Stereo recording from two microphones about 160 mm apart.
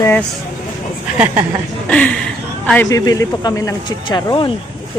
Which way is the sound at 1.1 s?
10° right (ahead or behind).